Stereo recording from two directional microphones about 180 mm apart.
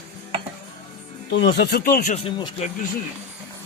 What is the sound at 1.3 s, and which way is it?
Speech, 75° left (ahead or behind).